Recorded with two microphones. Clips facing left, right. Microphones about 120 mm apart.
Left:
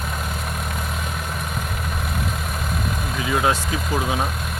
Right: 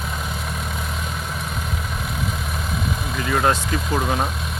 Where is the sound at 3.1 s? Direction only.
5° left (ahead or behind).